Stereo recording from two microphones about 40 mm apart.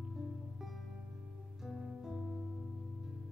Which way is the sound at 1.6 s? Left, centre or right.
Centre.